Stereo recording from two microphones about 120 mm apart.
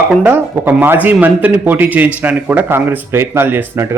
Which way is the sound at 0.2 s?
15° right (ahead or behind).